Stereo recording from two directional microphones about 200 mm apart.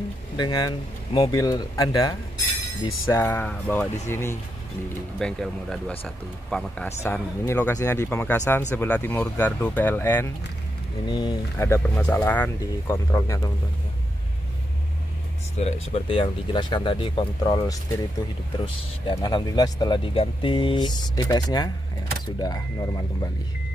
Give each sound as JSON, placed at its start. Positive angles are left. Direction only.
{"t": 0.4, "sound": "speech", "side_deg": 20}
{"t": 11.1, "sound": "speech", "side_deg": 20}
{"t": 15.6, "sound": "speech", "side_deg": 30}
{"t": 19.0, "sound": "speech", "side_deg": 20}